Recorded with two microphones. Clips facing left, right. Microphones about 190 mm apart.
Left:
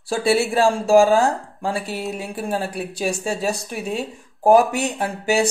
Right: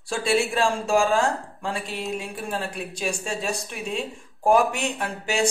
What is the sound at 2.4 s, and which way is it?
Speech, 35° left (ahead or behind).